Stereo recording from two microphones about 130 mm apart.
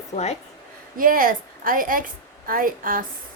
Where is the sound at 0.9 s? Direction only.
90° right.